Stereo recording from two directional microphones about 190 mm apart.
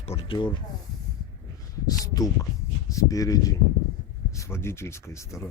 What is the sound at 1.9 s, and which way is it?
Speech, 20° left (ahead or behind).